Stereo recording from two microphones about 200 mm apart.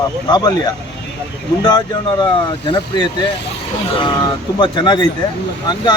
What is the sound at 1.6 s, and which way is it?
Speech, 20° left (ahead or behind).